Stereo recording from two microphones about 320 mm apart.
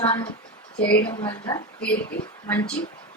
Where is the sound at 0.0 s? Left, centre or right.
Centre.